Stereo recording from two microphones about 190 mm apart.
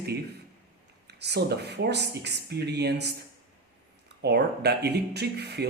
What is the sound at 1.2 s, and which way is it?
Speech, 60° right (ahead or behind).